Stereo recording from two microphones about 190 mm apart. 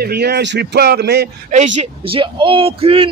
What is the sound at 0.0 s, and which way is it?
Speech, 60° right (ahead or behind).